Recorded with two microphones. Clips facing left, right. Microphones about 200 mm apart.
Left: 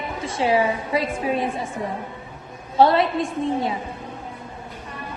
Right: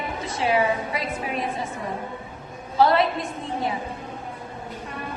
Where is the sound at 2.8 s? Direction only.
25° left (ahead or behind).